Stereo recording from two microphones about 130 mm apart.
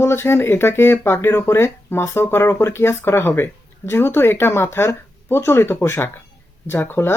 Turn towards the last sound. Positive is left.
turn(degrees=15)  # may be behind; listen again after turning